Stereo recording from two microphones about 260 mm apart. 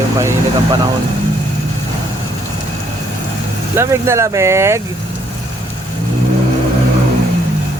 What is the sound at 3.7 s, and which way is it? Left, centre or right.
Speech, centre.